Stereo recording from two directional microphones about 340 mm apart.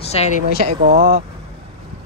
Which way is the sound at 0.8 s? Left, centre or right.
Right.